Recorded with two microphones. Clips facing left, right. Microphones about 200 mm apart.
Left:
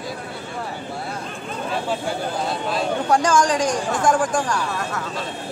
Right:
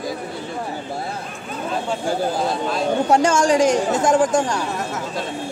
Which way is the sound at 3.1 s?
25° right (ahead or behind).